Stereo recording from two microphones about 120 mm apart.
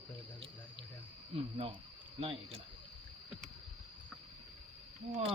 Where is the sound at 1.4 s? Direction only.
55° right (ahead or behind).